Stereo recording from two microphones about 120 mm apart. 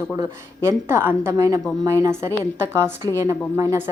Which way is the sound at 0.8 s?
20° right (ahead or behind).